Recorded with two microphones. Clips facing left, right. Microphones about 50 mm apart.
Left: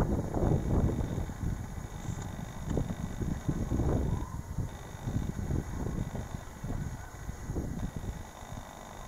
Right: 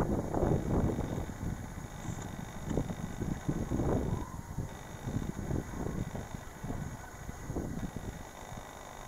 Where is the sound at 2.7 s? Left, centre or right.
Right.